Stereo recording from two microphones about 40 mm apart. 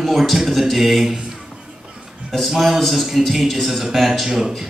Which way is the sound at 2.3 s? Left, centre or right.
Centre.